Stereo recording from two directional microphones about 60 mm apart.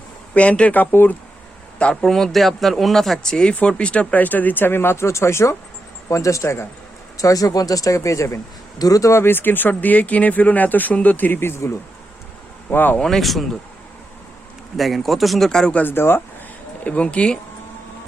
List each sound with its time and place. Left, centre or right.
0.3 s speech: left
2.0 s speech: centre; by 6.7 s left
7.2 s speech: left
8.8 s speech: left
9.2 s speech: left
12.7 s speech: left
13.0 s speech: centre
14.8 s speech: centre
15.7 s speech: left
16.8 s speech: left